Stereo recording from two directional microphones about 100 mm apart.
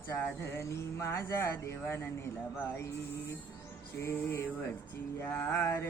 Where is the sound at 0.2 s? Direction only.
20° left (ahead or behind).